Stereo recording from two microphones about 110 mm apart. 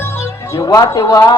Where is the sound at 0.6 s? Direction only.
35° left (ahead or behind).